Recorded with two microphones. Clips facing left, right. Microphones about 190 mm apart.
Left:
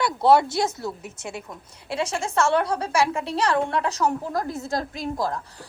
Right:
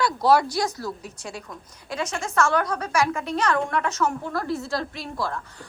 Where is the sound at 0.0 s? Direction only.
25° left (ahead or behind).